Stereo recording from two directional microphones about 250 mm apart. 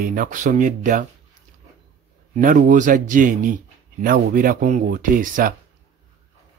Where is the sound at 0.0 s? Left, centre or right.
Right.